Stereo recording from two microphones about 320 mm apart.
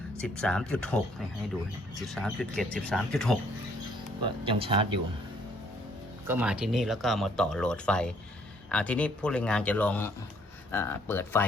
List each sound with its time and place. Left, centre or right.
0.2 s speech: centre
2.0 s speech: centre
4.4 s speech: centre
6.2 s speech: centre